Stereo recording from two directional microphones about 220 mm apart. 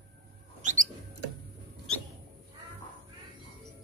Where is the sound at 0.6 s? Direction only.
35° right (ahead or behind).